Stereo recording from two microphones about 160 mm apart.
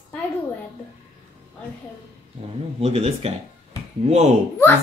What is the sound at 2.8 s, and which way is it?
Speech, 40° right (ahead or behind).